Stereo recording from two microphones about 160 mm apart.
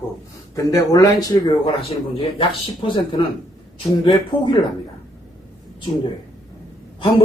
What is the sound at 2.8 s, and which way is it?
Speech, 30° left (ahead or behind).